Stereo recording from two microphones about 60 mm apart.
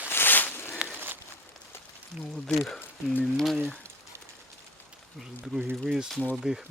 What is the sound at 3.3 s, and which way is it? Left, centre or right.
Speech, centre.